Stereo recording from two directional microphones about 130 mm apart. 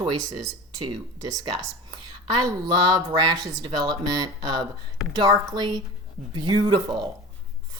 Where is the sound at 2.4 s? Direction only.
30° right (ahead or behind).